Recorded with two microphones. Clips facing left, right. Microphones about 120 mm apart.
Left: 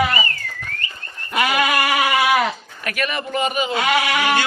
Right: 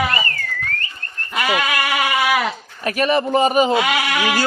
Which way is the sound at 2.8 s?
30° right (ahead or behind).